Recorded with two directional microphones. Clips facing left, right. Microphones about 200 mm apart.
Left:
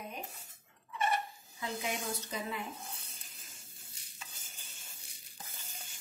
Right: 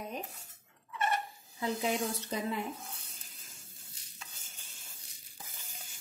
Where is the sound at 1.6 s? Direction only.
35° right (ahead or behind).